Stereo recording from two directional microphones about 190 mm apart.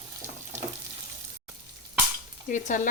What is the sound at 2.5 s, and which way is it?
Speech, 40° left (ahead or behind).